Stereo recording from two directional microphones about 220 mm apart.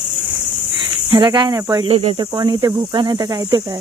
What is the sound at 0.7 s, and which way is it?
Speech, 20° right (ahead or behind).